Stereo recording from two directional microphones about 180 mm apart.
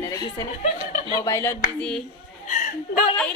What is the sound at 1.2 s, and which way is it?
Speech, 15° left (ahead or behind).